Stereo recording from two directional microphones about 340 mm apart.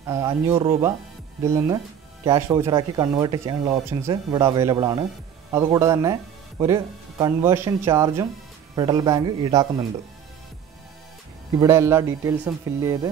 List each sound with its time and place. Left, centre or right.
0.0 s speech: centre
2.2 s speech: centre
11.6 s speech: centre